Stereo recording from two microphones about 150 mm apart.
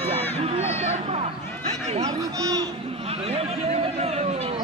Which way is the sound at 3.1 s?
40° right (ahead or behind).